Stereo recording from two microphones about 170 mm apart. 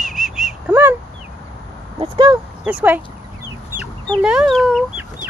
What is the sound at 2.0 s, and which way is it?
Speech, 30° right (ahead or behind).